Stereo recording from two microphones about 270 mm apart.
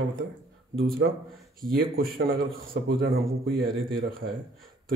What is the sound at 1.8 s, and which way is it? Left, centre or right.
Speech, right.